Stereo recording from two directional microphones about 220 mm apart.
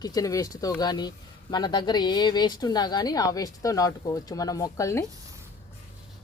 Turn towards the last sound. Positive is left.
turn(degrees=15)  # may be behind; listen again after turning